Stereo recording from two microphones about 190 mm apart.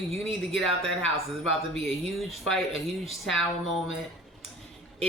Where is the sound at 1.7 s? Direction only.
Centre (ahead or behind).